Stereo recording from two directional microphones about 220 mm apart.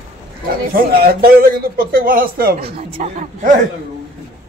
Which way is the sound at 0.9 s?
45° right (ahead or behind).